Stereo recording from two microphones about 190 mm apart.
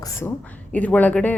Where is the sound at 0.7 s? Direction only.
10° left (ahead or behind).